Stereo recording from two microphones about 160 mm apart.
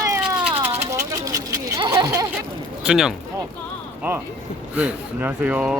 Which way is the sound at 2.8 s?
5° right (ahead or behind).